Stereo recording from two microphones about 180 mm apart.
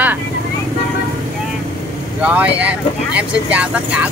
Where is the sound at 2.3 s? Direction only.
5° right (ahead or behind).